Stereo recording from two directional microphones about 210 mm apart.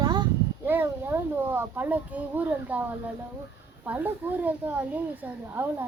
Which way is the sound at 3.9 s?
10° right (ahead or behind).